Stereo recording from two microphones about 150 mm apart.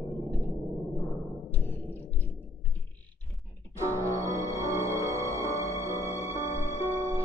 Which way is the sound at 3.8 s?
20° right (ahead or behind).